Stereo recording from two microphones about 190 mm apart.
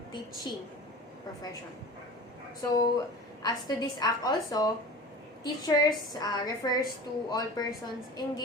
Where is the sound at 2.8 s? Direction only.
20° left (ahead or behind).